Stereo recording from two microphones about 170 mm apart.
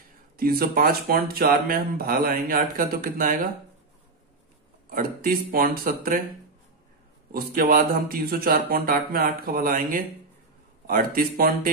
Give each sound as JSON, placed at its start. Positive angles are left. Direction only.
{"t": 0.4, "sound": "speech", "side_deg": -60}
{"t": 4.8, "sound": "speech", "side_deg": -55}
{"t": 7.3, "sound": "speech", "side_deg": -60}